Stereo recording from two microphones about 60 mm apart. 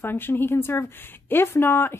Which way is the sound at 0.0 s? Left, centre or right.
Left.